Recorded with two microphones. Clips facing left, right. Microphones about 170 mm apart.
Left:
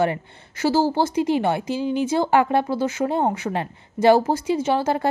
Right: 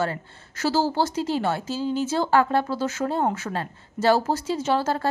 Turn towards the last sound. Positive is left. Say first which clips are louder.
# left 3 dB
turn(degrees=15)  # may be behind; listen again after turning